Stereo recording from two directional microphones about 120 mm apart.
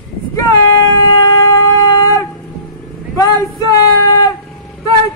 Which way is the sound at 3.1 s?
30° left (ahead or behind).